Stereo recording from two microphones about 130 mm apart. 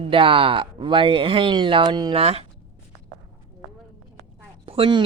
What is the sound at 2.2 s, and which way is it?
Speech, 50° right (ahead or behind).